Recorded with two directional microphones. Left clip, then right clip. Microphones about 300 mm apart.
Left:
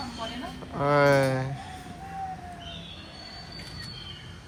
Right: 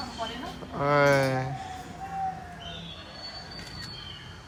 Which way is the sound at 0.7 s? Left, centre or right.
Centre.